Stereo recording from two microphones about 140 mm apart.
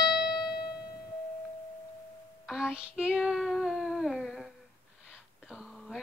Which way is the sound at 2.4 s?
5° right (ahead or behind).